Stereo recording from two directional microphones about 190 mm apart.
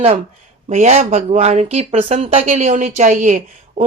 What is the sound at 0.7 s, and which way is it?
Speech, 35° right (ahead or behind).